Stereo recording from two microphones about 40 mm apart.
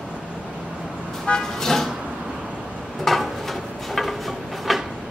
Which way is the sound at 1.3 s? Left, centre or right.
Left.